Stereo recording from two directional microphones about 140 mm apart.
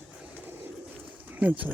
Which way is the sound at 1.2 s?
10° right (ahead or behind).